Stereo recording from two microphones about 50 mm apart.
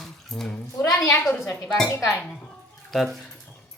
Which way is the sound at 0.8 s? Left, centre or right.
Left.